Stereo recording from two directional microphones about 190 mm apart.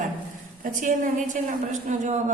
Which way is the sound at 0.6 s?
45° right (ahead or behind).